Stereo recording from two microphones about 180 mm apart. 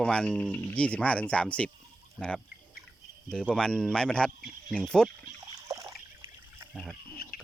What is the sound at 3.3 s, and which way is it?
Speech, 5° left (ahead or behind).